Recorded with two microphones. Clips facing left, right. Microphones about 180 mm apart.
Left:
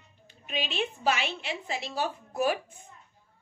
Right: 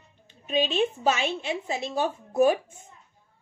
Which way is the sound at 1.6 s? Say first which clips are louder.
Right 3 dB; 20° right (ahead or behind).